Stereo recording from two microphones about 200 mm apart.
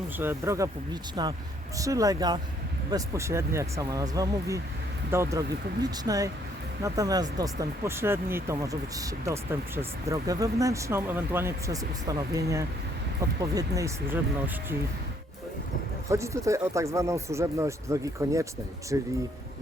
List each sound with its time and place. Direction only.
0.2 s speech: 10° right (ahead or behind)
16.0 s speech: 15° right (ahead or behind)